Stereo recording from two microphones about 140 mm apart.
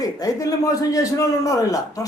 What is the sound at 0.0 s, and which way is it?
A man's voice, 25° left (ahead or behind).